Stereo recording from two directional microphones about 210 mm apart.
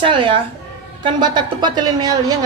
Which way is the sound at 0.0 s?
25° right (ahead or behind).